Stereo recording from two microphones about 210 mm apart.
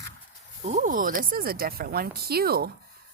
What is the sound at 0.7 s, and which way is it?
Speech, 35° right (ahead or behind).